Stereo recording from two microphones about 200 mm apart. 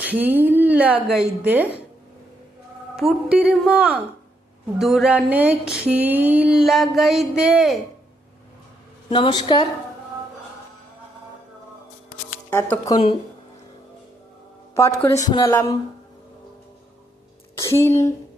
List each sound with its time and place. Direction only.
0.0 s a woman's voice: 10° right (ahead or behind)
2.9 s a sound: centre (ahead or behind)
9.0 s a woman's voice: 25° left (ahead or behind)
12.7 s a woman's voice: 15° left (ahead or behind)
14.8 s a woman's voice: 15° left (ahead or behind)
17.6 s a woman's voice: 15° left (ahead or behind)